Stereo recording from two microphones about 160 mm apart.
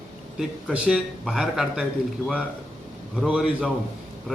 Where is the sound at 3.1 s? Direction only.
5° right (ahead or behind).